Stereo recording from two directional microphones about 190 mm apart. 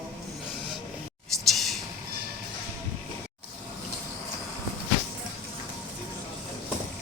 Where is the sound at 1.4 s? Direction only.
Centre (ahead or behind).